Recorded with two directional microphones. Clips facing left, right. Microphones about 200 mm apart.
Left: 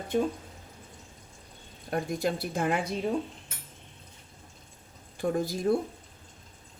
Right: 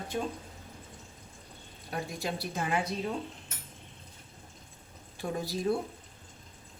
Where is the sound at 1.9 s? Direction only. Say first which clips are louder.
Left 6 dB; 50° left (ahead or behind).